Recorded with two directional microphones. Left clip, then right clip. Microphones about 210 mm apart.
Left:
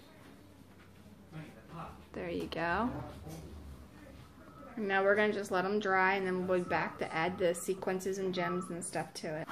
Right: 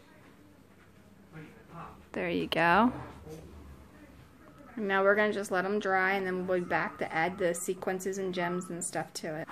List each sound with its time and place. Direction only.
2.1 s speech: 40° right (ahead or behind)
4.7 s a woman's voice: 30° right (ahead or behind)